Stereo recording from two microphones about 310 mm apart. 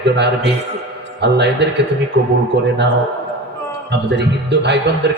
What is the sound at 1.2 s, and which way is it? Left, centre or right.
Speech, right.